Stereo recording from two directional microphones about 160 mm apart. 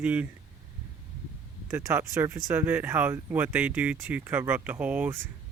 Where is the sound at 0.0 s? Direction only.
10° right (ahead or behind).